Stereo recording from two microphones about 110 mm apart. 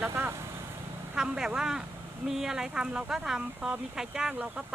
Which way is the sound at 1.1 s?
5° right (ahead or behind).